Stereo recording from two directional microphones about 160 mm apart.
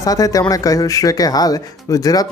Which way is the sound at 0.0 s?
20° left (ahead or behind).